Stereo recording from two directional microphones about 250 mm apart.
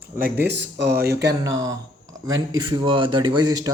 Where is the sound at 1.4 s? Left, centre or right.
Centre.